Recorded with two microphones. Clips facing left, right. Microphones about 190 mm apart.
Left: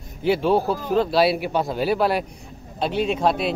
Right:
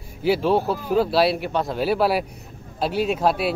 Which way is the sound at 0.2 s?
Centre (ahead or behind).